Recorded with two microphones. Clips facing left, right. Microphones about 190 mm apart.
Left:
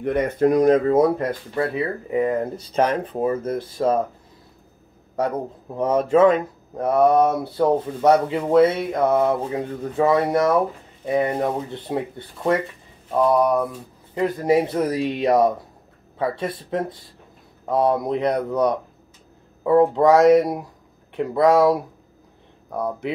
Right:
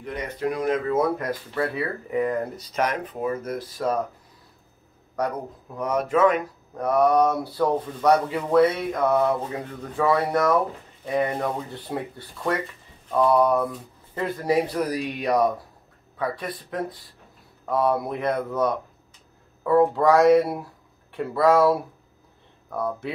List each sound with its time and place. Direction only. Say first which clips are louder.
0.0 s speech: left 9 dB; 55° left (ahead or behind); by 4.0 s 25° left (ahead or behind)
5.2 s speech: left 4 dB; 25° left (ahead or behind)